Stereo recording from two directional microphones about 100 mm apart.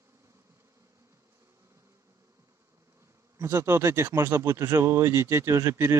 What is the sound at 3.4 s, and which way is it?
Speech, 25° right (ahead or behind).